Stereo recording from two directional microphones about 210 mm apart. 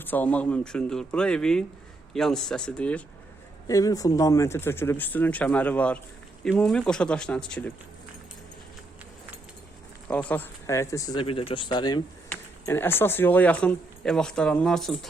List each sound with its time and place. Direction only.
0.0 s speech: 10° left (ahead or behind)
3.7 s speech: 15° left (ahead or behind)
10.1 s speech: 5° left (ahead or behind)